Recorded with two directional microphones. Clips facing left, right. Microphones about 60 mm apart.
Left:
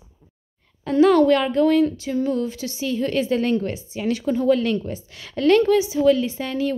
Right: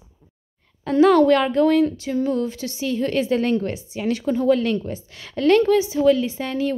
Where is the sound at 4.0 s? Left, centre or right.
Right.